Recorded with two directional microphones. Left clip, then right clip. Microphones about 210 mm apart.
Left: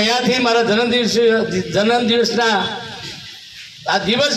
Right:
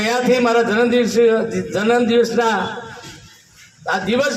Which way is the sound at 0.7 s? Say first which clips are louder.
Even; 35° left (ahead or behind).